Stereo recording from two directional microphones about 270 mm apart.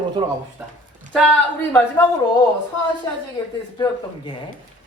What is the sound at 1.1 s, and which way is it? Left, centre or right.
Speech, centre.